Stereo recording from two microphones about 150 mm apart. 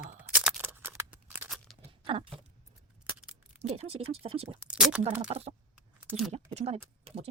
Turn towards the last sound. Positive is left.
turn(degrees=-45)  # may be behind; listen again after turning